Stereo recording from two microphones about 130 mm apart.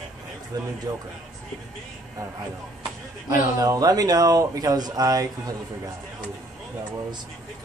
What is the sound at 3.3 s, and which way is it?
Speech, 25° right (ahead or behind).